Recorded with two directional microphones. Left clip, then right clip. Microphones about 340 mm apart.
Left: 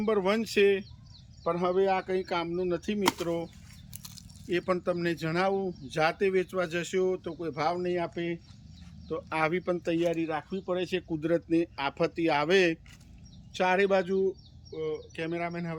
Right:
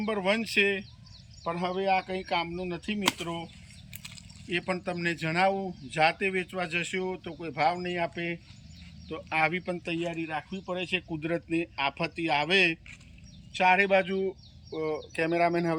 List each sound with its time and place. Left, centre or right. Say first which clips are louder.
0.0 s speech: left 1 dB; centre
4.4 s speech: left 2 dB; centre
14.8 s speech: right 4 dB; centre